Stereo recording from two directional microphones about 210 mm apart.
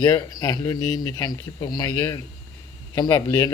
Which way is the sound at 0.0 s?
20° left (ahead or behind).